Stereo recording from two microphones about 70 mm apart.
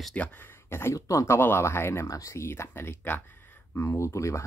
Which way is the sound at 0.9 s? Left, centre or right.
Left.